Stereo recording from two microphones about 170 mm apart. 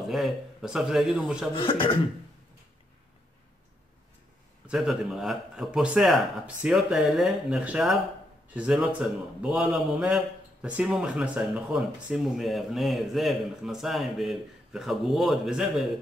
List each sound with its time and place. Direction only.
0.1 s a man's voice: centre (ahead or behind)
1.5 s speech: 30° left (ahead or behind)
4.6 s a man's voice: centre (ahead or behind)